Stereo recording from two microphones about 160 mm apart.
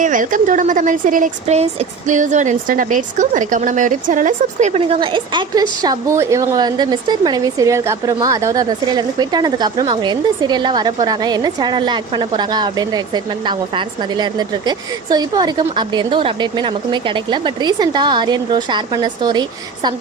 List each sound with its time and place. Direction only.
0.0 s a woman's voice: 55° right (ahead or behind); by 19.9 s 25° right (ahead or behind)